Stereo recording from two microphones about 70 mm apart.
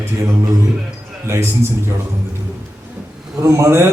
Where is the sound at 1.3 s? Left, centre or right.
Right.